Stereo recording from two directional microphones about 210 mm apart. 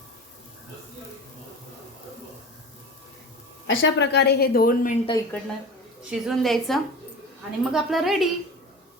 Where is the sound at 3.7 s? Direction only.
65° left (ahead or behind); by 5.0 s 40° left (ahead or behind).